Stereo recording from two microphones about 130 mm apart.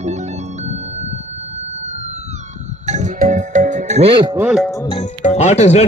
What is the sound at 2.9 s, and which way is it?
Music, 65° right (ahead or behind).